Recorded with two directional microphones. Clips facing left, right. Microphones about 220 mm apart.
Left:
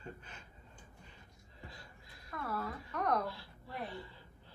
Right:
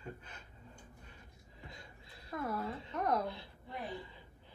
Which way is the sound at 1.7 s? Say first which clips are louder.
Right 1 dB; 25° right (ahead or behind).